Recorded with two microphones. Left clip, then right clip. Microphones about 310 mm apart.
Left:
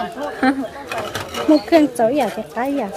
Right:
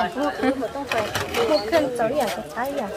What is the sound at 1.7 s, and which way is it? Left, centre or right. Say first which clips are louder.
Speech: left 6 dB; left.